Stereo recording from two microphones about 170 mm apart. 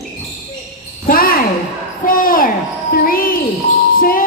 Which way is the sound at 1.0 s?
60° left (ahead or behind).